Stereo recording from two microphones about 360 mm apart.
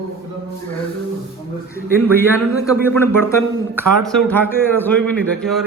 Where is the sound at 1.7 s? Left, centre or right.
Centre.